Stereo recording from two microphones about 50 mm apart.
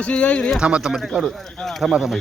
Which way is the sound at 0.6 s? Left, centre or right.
Right.